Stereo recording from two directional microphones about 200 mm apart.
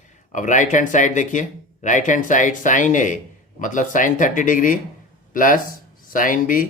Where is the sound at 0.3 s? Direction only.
40° left (ahead or behind).